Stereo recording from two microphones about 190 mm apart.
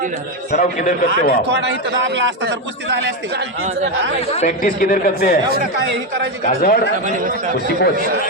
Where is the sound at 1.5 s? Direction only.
65° right (ahead or behind).